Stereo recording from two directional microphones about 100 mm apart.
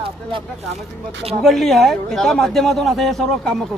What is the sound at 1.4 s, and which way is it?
A man's voice, centre (ahead or behind).